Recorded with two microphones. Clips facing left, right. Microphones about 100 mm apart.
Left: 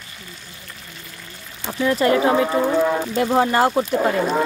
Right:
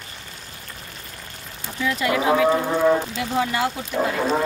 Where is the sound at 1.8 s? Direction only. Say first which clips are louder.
Left 4 dB; 40° left (ahead or behind).